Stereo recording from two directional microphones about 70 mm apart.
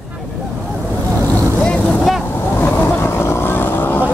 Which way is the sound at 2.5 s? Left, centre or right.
Left.